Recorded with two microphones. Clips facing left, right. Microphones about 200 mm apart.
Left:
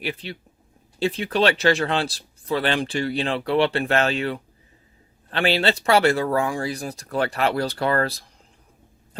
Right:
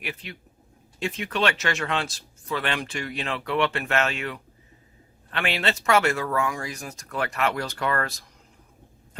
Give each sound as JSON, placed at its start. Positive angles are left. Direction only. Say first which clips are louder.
{"t": 0.0, "sound": "speech", "louder": "left 6 dB", "side_deg": 35}